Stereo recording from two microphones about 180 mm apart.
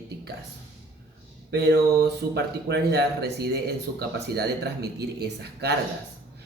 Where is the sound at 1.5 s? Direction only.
70° right (ahead or behind).